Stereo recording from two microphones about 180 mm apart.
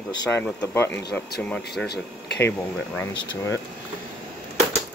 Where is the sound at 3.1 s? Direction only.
25° left (ahead or behind).